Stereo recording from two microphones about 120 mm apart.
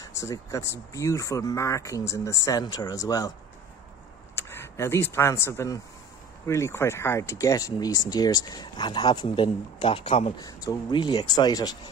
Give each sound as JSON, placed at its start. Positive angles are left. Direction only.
{"t": 0.0, "sound": "speech", "side_deg": 25}
{"t": 4.4, "sound": "speech", "side_deg": 20}
{"t": 9.3, "sound": "speech", "side_deg": 50}
{"t": 10.3, "sound": "speech", "side_deg": 30}